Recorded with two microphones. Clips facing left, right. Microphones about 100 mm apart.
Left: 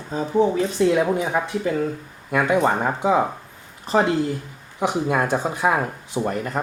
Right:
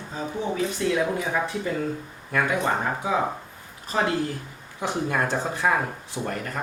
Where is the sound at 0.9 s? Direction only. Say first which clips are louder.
Left 4 dB; 25° left (ahead or behind).